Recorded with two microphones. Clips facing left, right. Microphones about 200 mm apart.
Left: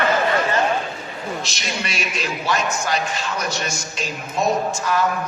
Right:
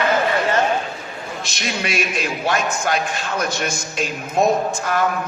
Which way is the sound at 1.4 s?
55° right (ahead or behind).